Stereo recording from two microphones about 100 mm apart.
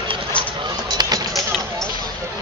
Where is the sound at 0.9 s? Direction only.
40° right (ahead or behind).